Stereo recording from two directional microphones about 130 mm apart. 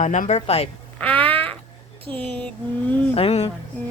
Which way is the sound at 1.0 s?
45° right (ahead or behind).